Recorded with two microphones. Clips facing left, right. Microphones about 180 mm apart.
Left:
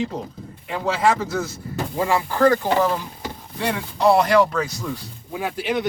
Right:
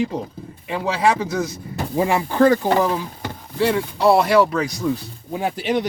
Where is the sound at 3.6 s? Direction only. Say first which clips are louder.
Right 3 dB; 5° right (ahead or behind).